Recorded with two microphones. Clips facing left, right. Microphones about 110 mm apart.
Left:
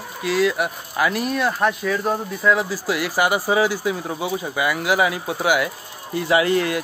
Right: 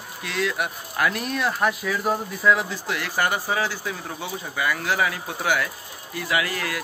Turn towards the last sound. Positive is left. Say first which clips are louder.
# left 8 dB
turn(degrees=25)  # may be behind; listen again after turning